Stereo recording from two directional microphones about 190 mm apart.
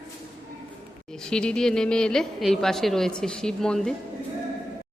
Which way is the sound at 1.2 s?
5° left (ahead or behind).